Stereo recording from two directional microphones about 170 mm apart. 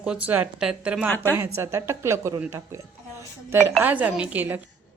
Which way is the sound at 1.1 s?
10° left (ahead or behind).